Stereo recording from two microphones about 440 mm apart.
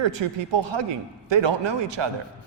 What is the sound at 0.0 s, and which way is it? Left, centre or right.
A man's voice, right.